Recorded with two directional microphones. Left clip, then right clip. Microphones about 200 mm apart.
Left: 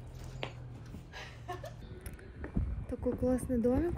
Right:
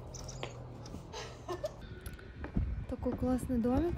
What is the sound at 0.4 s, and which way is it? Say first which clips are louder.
Music: left 3 dB; 25° left (ahead or behind).